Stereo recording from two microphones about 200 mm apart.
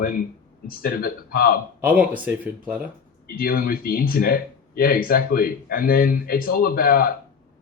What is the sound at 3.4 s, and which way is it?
Speech, 45° left (ahead or behind).